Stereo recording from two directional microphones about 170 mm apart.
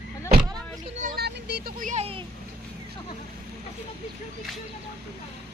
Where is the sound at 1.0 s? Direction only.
70° right (ahead or behind).